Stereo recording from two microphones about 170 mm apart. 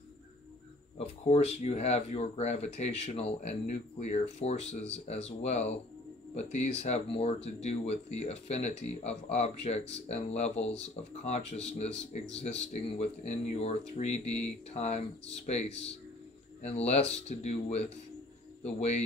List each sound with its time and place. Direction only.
0.9 s speech: 35° left (ahead or behind)